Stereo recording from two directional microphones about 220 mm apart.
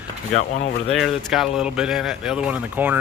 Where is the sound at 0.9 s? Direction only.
Centre (ahead or behind).